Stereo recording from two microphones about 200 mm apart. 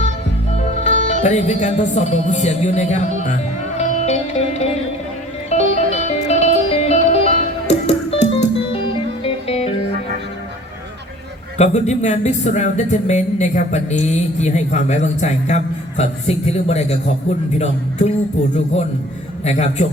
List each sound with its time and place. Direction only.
0.6 s speech: 35° left (ahead or behind)
3.8 s music: 35° left (ahead or behind)
11.5 s speech: 35° left (ahead or behind)
18.5 s speech: 30° left (ahead or behind)